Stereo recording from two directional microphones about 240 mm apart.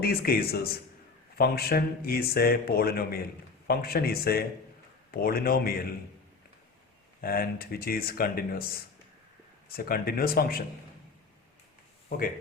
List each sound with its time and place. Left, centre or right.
0.0 s speech: left
7.2 s speech: left
9.6 s speech: left
12.0 s speech: left